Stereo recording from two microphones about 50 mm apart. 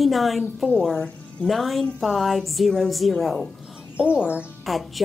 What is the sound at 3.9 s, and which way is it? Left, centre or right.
Speech, right.